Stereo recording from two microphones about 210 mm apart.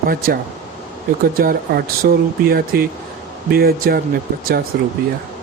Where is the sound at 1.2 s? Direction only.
45° right (ahead or behind).